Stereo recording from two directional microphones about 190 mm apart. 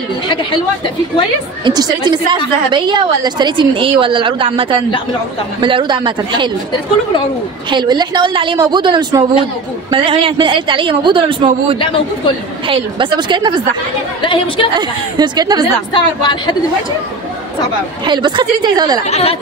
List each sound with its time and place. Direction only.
0.3 s a woman's voice: 25° left (ahead or behind)
1.6 s a woman's voice: 20° right (ahead or behind)
7.7 s a woman's voice: 20° right (ahead or behind)
14.2 s speech: 25° left (ahead or behind)
14.8 s a woman's voice: 20° right (ahead or behind)
15.9 s speech: 25° left (ahead or behind)
18.0 s a woman's voice: 25° right (ahead or behind)
19.0 s speech: 35° left (ahead or behind)